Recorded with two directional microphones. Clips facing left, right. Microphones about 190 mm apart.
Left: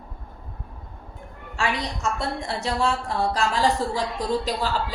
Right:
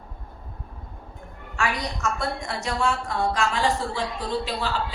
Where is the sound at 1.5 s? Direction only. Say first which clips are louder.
Left 1 dB; 30° left (ahead or behind).